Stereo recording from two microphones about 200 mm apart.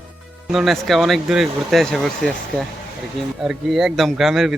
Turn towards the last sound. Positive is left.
turn(degrees=0)  # may be behind; listen again after turning